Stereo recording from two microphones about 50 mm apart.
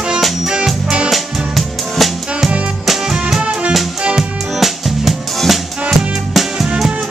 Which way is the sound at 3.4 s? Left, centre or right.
Right.